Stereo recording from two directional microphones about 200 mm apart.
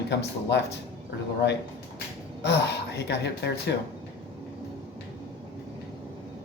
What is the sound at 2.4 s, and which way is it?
Speech, 60° left (ahead or behind).